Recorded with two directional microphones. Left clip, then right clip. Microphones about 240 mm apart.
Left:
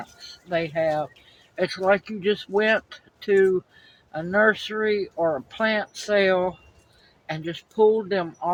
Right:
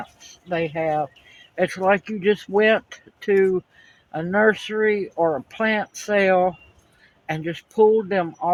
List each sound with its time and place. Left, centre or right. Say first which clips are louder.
0.0 s speech: right 2 dB; right
1.5 s speech: right 2 dB; right